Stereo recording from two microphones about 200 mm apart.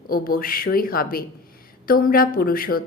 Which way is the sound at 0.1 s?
45° left (ahead or behind).